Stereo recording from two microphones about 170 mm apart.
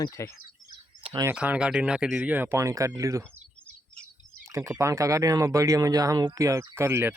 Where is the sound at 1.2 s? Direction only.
10° right (ahead or behind).